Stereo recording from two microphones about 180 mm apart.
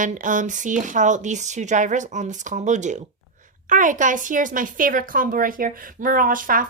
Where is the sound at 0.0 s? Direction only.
45° right (ahead or behind).